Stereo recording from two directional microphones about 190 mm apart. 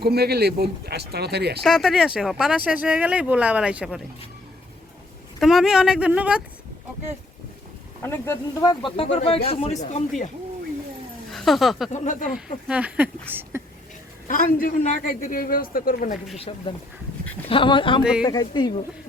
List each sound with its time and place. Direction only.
0.0 s speech: 55° right (ahead or behind)
1.6 s speech: centre (ahead or behind)
5.4 s speech: centre (ahead or behind)
8.0 s speech: 10° left (ahead or behind)
8.8 s speech: 30° left (ahead or behind)
11.3 s speech: centre (ahead or behind)
11.9 s speech: 40° left (ahead or behind)
12.6 s speech: 5° right (ahead or behind)
14.3 s a man's voice: 45° left (ahead or behind)
16.4 s speech: 30° left (ahead or behind)